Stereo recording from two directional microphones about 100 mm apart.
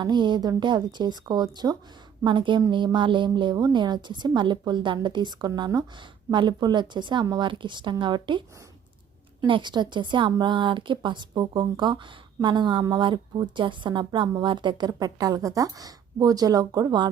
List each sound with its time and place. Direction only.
0.0 s a woman's voice: 50° right (ahead or behind)
9.5 s a woman's voice: 50° right (ahead or behind)